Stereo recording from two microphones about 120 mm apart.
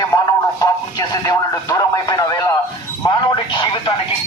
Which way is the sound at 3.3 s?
40° left (ahead or behind).